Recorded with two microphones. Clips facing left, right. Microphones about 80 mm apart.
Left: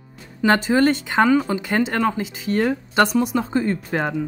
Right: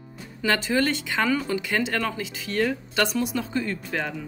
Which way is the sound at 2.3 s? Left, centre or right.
Left.